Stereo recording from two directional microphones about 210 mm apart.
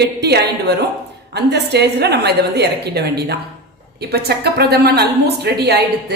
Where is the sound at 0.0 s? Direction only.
50° right (ahead or behind).